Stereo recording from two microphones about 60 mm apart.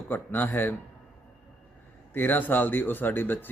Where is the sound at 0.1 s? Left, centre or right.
Left.